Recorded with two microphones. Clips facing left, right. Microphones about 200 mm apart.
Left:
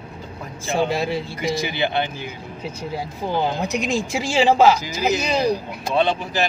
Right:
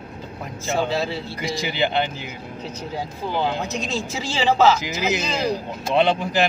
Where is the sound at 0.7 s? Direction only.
15° left (ahead or behind).